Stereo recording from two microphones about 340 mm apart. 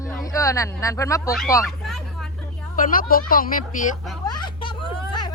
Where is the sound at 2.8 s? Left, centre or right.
Left.